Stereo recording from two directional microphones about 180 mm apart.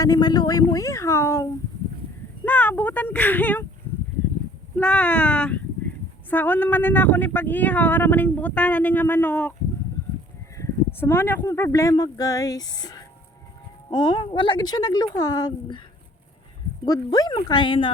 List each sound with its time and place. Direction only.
0.0 s speech: 20° left (ahead or behind)
4.8 s speech: 5° left (ahead or behind)
10.0 s a sound: 15° left (ahead or behind)
10.6 s speech: 10° left (ahead or behind)
16.8 s speech: 20° left (ahead or behind)